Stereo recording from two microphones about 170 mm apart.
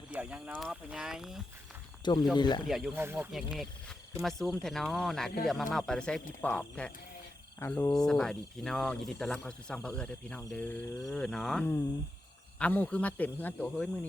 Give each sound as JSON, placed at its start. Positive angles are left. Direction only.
{"t": 0.1, "sound": "speech", "side_deg": -10}
{"t": 2.3, "sound": "speech", "side_deg": 25}
{"t": 2.6, "sound": "speech", "side_deg": 0}
{"t": 2.9, "sound": "speech", "side_deg": -15}
{"t": 3.3, "sound": "a man's voice", "side_deg": 0}
{"t": 7.9, "sound": "a man's voice", "side_deg": 5}